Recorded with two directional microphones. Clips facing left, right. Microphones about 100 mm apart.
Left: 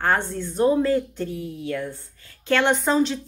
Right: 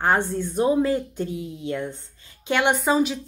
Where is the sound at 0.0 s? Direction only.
15° right (ahead or behind).